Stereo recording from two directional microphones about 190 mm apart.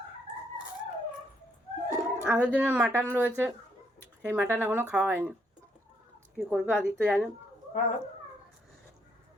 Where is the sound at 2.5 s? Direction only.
10° right (ahead or behind).